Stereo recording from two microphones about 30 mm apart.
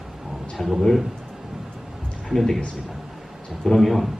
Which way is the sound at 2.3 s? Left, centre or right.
Centre.